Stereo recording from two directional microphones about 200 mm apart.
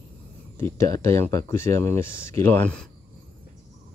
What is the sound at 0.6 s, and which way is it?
Speech, 15° left (ahead or behind).